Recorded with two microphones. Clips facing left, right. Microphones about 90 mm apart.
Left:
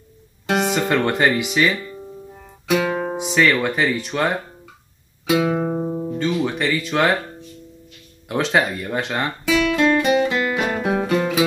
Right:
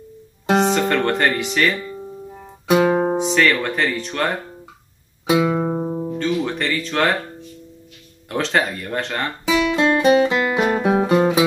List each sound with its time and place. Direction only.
0.5 s music: 30° right (ahead or behind)
0.7 s speech: 5° left (ahead or behind)
2.7 s music: 35° right (ahead or behind)
3.2 s speech: 5° left (ahead or behind)
5.6 s music: 10° right (ahead or behind)
6.1 s speech: 5° left (ahead or behind)
8.3 s speech: 5° left (ahead or behind)
9.5 s music: 25° right (ahead or behind)
10.0 s guitar: 25° right (ahead or behind)
10.8 s music: 35° right (ahead or behind)